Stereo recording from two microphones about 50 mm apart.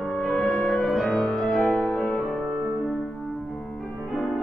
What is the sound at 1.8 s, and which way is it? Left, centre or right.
Music, left.